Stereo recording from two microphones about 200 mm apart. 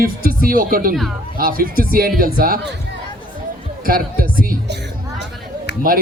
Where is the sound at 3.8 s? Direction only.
45° right (ahead or behind).